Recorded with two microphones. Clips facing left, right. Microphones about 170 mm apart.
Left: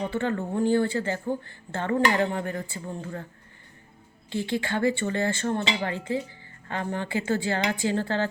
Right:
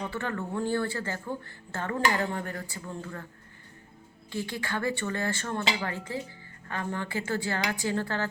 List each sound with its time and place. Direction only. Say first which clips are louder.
0.0 s speech: left 5 dB; 25° left (ahead or behind)
4.3 s speech: left 5 dB; 20° left (ahead or behind)